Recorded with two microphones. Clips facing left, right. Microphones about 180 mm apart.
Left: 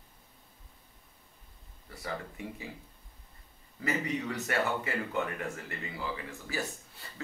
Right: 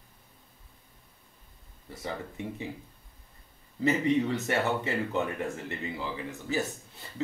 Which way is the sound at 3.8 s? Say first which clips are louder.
Right 8 dB; 25° right (ahead or behind).